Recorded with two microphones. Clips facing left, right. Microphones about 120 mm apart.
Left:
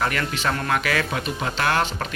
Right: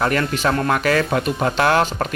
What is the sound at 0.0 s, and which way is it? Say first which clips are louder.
Speech: right 5 dB; 40° right (ahead or behind).